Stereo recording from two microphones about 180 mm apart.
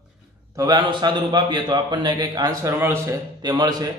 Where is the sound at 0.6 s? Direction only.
20° right (ahead or behind).